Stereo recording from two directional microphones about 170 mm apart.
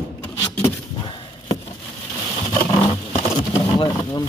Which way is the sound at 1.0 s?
30° left (ahead or behind).